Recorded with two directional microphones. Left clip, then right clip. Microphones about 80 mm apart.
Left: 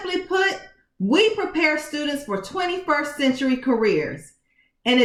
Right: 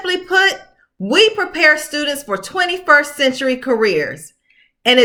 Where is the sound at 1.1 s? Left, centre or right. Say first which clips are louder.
Right 6 dB; right.